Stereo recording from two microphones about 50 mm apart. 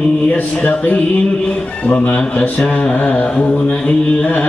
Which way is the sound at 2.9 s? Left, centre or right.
Left.